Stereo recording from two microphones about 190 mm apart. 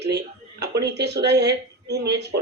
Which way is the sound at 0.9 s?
60° right (ahead or behind).